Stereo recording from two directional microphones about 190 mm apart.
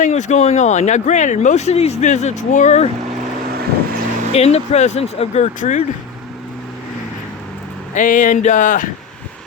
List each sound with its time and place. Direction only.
0.0 s speech: 40° left (ahead or behind)
4.4 s speech: 35° left (ahead or behind)
7.9 s speech: 45° left (ahead or behind)